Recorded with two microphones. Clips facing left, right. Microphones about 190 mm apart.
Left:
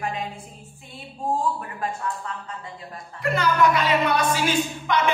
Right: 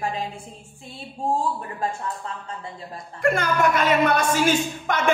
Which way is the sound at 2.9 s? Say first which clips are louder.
Right 4 dB; 50° right (ahead or behind).